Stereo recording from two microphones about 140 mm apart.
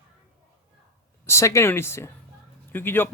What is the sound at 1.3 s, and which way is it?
Speech, 20° left (ahead or behind).